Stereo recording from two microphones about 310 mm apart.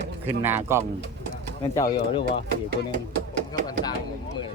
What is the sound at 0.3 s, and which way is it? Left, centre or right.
Speech, centre.